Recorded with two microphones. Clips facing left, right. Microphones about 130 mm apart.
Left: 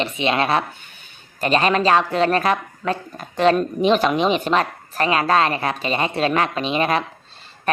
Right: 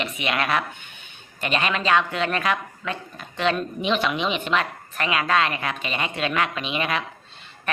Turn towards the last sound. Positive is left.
turn(degrees=35)  # may be behind; listen again after turning